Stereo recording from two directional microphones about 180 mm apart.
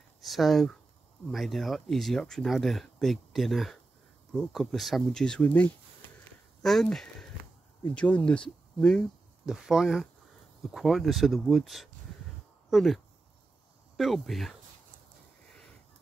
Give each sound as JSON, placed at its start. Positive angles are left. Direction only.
{"t": 0.2, "sound": "speech", "side_deg": 0}